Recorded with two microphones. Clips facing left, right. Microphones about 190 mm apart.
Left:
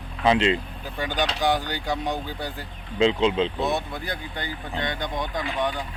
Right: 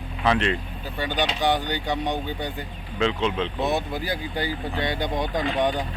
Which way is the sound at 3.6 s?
Centre (ahead or behind).